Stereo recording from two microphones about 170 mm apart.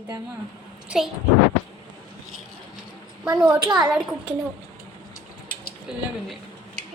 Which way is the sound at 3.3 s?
10° right (ahead or behind).